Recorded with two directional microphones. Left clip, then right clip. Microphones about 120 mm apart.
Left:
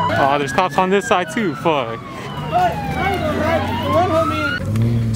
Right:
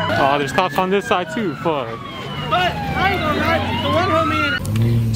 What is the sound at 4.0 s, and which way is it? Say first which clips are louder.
Speech: left 1 dB; 35° right (ahead or behind).